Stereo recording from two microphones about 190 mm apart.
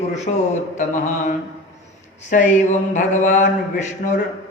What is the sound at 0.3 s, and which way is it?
Mantra, 40° left (ahead or behind).